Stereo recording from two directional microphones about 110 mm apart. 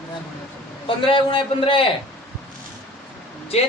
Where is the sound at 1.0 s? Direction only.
55° left (ahead or behind).